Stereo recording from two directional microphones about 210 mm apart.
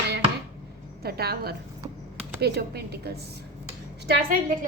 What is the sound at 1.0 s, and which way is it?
A woman's voice, 50° right (ahead or behind).